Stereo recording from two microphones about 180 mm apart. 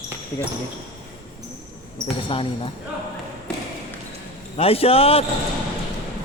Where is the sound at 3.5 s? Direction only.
5° left (ahead or behind).